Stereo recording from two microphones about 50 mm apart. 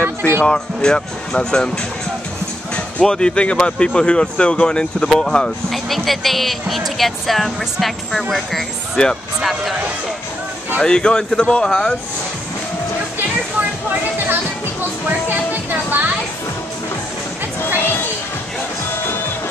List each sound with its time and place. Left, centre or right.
0.0 s music: left
0.4 s speech: centre
2.7 s speech: centre
10.8 s speech: centre
13.6 s music: right
17.7 s music: left